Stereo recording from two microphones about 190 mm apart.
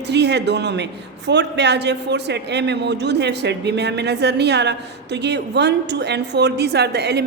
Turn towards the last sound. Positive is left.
turn(degrees=-60)  # may be behind; listen again after turning